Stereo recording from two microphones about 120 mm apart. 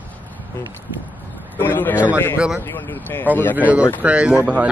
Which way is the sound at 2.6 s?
15° left (ahead or behind).